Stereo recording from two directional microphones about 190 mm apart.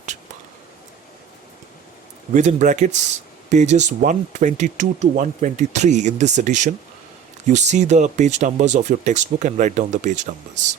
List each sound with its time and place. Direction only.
2.3 s speech: 40° right (ahead or behind)